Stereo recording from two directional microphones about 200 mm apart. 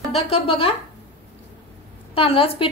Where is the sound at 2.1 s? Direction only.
25° left (ahead or behind).